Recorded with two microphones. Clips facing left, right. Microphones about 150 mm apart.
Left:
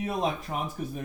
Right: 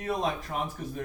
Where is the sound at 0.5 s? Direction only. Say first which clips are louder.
Even; 20° left (ahead or behind).